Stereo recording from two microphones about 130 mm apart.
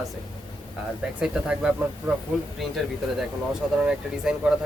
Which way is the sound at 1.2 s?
5° right (ahead or behind).